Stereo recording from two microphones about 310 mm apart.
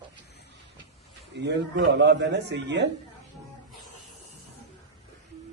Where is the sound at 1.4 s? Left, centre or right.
Right.